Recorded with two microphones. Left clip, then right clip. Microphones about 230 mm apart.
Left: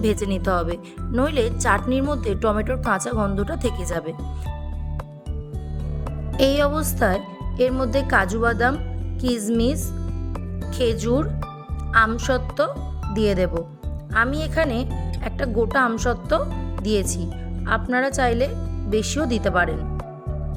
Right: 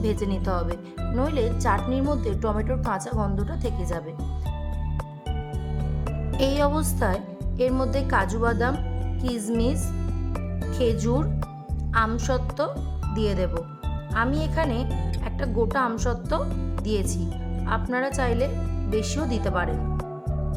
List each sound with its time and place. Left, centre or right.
0.0 s a woman's voice: centre
6.3 s a woman's voice: centre